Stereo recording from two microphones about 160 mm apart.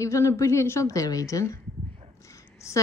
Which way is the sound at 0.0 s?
20° left (ahead or behind).